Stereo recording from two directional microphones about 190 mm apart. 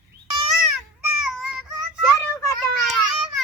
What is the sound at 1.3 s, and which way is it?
Child singing, 5° right (ahead or behind).